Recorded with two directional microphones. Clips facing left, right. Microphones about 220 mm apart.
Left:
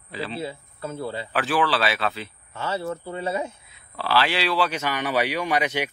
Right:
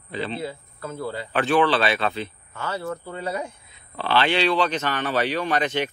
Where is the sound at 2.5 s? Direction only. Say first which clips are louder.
Left 4 dB; 25° left (ahead or behind).